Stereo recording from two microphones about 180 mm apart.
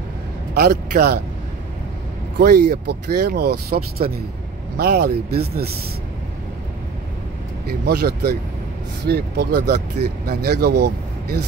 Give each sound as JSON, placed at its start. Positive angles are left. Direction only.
{"t": 0.6, "sound": "speech", "side_deg": -60}
{"t": 2.3, "sound": "speech", "side_deg": -60}
{"t": 7.8, "sound": "speech", "side_deg": -60}